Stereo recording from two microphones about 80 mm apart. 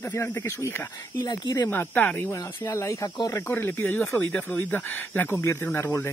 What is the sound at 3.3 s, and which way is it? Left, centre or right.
Speech, left.